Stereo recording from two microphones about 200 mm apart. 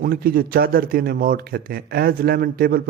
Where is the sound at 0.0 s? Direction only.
50° right (ahead or behind).